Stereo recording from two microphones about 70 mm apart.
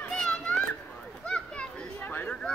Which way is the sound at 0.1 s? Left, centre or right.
Centre.